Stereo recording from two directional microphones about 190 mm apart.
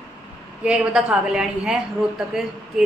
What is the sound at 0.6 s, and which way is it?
A man's voice, 5° right (ahead or behind).